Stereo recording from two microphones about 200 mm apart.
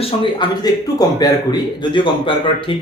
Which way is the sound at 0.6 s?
20° left (ahead or behind).